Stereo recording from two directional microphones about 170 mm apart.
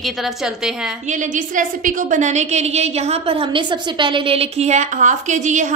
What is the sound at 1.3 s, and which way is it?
A woman's voice, 50° right (ahead or behind).